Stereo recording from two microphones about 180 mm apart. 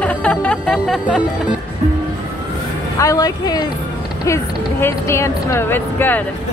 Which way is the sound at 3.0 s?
20° left (ahead or behind).